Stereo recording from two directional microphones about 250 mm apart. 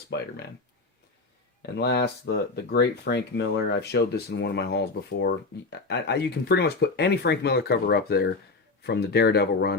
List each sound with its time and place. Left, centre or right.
0.1 s speech: left
1.6 s speech: left